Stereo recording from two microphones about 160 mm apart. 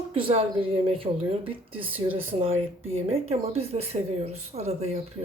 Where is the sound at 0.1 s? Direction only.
35° right (ahead or behind).